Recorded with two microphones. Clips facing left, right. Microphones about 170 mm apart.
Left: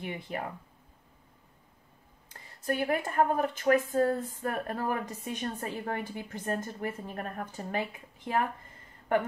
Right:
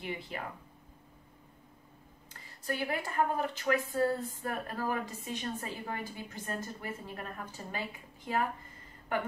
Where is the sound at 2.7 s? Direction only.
50° left (ahead or behind).